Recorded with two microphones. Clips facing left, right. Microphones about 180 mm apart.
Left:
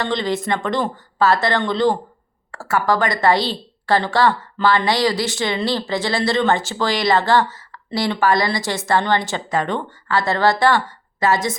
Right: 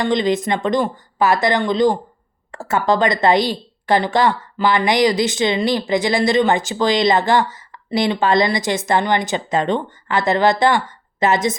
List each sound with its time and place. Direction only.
0.0 s a woman's voice: 15° right (ahead or behind)